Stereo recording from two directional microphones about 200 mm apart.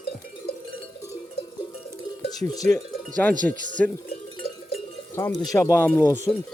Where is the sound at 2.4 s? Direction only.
15° left (ahead or behind).